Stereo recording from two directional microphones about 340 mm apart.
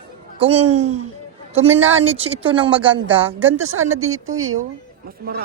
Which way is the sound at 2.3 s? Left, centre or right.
Centre.